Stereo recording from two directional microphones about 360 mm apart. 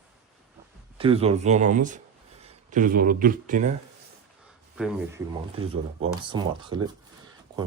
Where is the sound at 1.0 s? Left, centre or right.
Centre.